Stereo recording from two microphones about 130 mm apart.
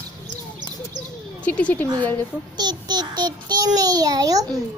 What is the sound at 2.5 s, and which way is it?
A child's voice, 35° right (ahead or behind).